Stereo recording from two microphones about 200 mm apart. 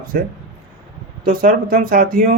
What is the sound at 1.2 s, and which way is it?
Speech, 45° right (ahead or behind).